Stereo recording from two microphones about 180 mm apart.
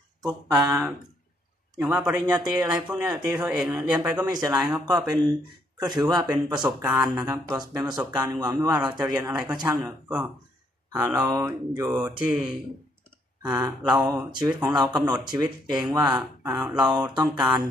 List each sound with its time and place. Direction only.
0.2 s speech: 20° right (ahead or behind)
1.8 s speech: 5° right (ahead or behind)
2.2 s speech: 20° right (ahead or behind)
3.3 s speech: 5° right (ahead or behind)
4.0 s speech: 20° right (ahead or behind)
4.6 s speech: 5° right (ahead or behind)
4.8 s speech: 20° right (ahead or behind)
9.8 s speech: 5° right (ahead or behind)
13.5 s speech: 20° right (ahead or behind)
13.9 s speech: 5° right (ahead or behind)
14.7 s speech: 20° right (ahead or behind)